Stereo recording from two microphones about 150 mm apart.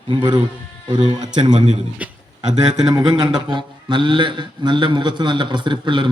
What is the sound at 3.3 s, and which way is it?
A man's voice, 30° right (ahead or behind).